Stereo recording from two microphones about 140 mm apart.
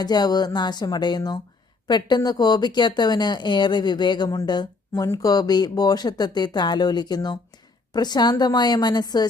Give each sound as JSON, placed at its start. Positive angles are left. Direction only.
{"t": 0.0, "sound": "speech", "side_deg": 30}